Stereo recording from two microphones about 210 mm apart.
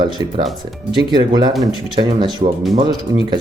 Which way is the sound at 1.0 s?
20° right (ahead or behind).